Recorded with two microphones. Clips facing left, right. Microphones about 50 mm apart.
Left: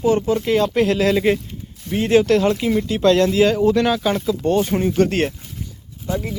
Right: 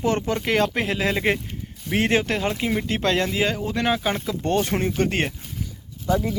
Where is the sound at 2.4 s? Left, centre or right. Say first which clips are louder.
Left 6 dB; centre.